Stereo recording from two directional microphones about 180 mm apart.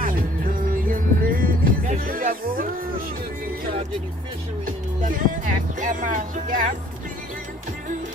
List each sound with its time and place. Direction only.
0.0 s music: 50° right (ahead or behind)
4.6 s speech: 50° right (ahead or behind)
5.8 s music: 45° right (ahead or behind)